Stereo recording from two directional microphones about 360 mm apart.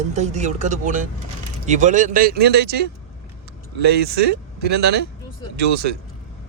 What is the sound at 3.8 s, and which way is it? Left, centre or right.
Speech, right.